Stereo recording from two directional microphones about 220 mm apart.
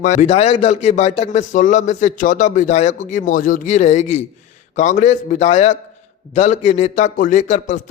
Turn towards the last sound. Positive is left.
turn(degrees=35)  # may be behind; listen again after turning